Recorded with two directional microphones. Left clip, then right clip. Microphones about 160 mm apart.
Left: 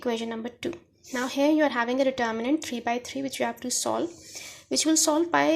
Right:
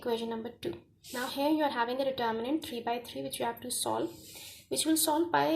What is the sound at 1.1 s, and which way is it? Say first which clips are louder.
A woman's voice: left 7 dB; 30° left (ahead or behind).